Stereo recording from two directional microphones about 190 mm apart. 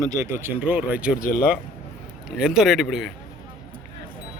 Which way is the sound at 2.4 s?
5° right (ahead or behind).